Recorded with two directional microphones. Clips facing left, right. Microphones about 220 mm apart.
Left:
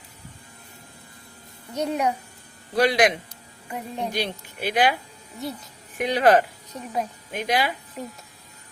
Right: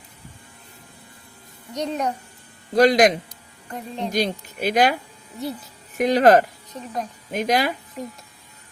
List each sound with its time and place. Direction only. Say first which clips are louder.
1.7 s speech: left 1 dB; 10° left (ahead or behind)
2.7 s speech: right 5 dB; 45° right (ahead or behind)
3.7 s speech: right 1 dB; 10° left (ahead or behind)
4.1 s speech: right 5 dB; 45° right (ahead or behind)
6.0 s speech: right 4 dB; 45° right (ahead or behind)
8.0 s speech: right 2 dB; centre (ahead or behind)